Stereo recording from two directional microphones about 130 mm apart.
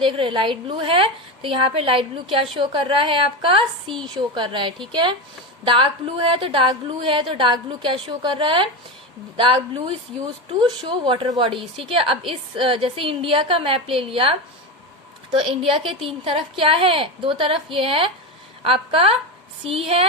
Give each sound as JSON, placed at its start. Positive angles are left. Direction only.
{"t": 0.0, "sound": "a woman's voice", "side_deg": -40}